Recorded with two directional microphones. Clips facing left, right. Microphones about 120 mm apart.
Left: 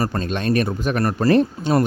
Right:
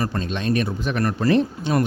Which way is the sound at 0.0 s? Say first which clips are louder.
Left 2 dB; 45° left (ahead or behind).